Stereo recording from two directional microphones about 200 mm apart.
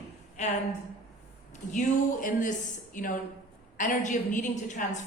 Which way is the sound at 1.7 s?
40° left (ahead or behind).